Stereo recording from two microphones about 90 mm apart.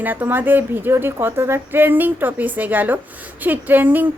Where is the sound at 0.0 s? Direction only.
20° right (ahead or behind).